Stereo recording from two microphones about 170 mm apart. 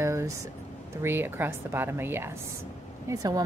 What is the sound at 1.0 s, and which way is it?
A woman's voice, 15° right (ahead or behind).